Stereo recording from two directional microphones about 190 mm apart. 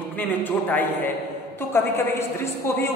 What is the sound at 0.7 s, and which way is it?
A man's voice, 10° left (ahead or behind).